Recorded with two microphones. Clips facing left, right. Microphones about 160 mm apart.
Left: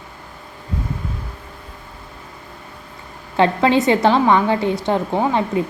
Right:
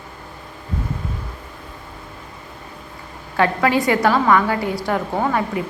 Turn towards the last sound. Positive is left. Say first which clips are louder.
# left 2 dB
turn(degrees=20)  # may be behind; listen again after turning